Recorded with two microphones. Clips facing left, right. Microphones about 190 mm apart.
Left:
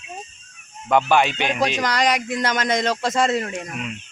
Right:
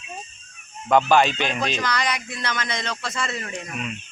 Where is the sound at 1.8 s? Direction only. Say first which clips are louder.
Left 5 dB; 45° left (ahead or behind).